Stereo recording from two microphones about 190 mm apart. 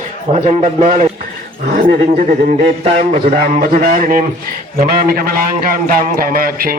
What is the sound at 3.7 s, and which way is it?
A man's voice, 50° right (ahead or behind).